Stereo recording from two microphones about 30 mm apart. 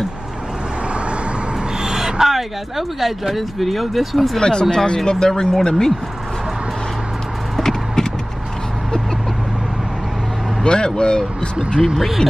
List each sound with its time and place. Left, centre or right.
2.0 s a sound: centre
3.0 s speech: centre
4.4 s speech: left
7.6 s a sound: centre
10.6 s speech: left
11.9 s speech: centre